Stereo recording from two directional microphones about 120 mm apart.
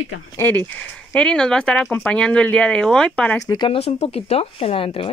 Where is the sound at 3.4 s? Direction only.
30° left (ahead or behind).